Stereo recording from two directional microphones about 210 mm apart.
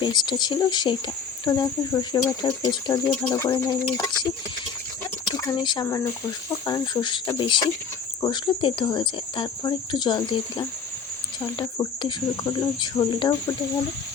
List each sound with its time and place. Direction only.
0.0 s speech: 20° left (ahead or behind)
5.3 s speech: 20° left (ahead or behind)